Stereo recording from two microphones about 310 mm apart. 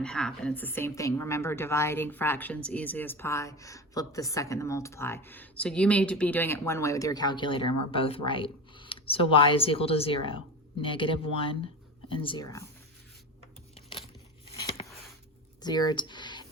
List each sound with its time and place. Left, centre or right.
0.0 s a woman's voice: centre
14.5 s a sound: centre
15.6 s speech: centre